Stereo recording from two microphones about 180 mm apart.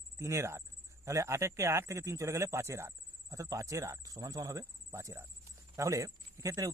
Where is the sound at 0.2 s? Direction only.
15° right (ahead or behind).